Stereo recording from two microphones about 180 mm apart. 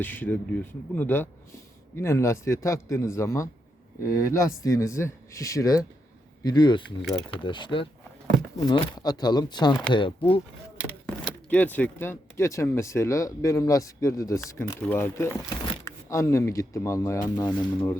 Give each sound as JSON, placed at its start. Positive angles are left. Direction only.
{"t": 0.0, "sound": "speech", "side_deg": 10}
{"t": 10.8, "sound": "speech", "side_deg": 10}